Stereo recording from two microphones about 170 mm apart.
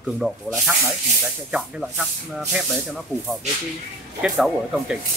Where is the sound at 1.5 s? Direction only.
Centre (ahead or behind).